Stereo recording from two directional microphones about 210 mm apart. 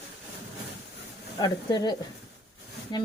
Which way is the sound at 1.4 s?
20° left (ahead or behind).